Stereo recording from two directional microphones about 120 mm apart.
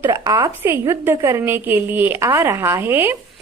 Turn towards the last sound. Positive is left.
turn(degrees=-20)  # may be behind; listen again after turning